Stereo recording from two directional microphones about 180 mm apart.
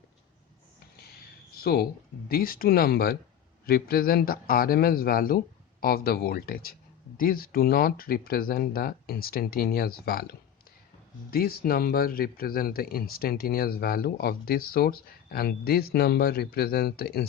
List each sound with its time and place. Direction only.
1.5 s speech: 60° left (ahead or behind)